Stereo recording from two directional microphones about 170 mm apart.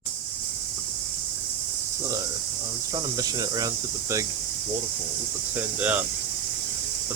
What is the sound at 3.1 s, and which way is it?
Cricket, 25° right (ahead or behind).